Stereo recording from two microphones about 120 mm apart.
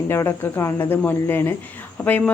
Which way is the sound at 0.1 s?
20° left (ahead or behind).